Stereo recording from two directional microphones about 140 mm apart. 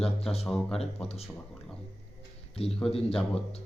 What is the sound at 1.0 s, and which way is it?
Speech, 45° left (ahead or behind).